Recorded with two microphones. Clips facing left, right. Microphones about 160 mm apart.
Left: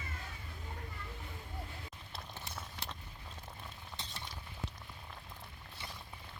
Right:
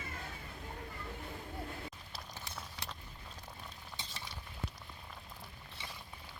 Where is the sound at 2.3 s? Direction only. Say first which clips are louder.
Even; centre (ahead or behind).